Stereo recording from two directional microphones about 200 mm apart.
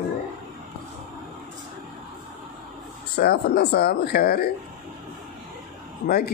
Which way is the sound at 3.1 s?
55° left (ahead or behind).